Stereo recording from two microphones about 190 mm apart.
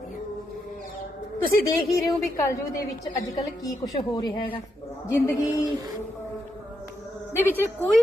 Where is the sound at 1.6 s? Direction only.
15° left (ahead or behind).